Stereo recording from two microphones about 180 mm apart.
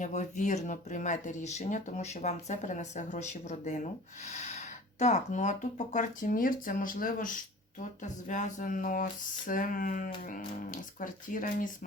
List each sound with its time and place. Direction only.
0.0 s speech: 40° left (ahead or behind)